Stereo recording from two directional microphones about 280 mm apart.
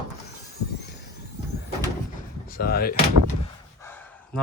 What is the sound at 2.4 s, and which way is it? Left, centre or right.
Speech, left.